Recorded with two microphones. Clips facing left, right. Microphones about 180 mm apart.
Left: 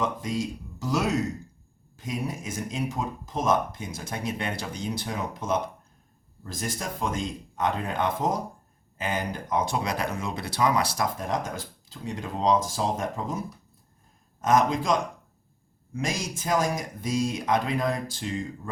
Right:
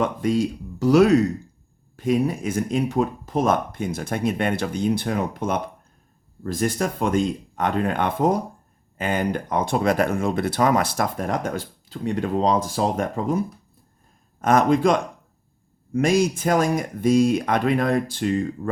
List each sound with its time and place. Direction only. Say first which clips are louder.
0.0 s speech: right 7 dB; 60° right (ahead or behind)
14.4 s speech: right 5 dB; 60° right (ahead or behind)